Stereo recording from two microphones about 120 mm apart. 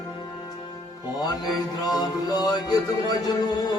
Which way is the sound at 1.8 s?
35° left (ahead or behind).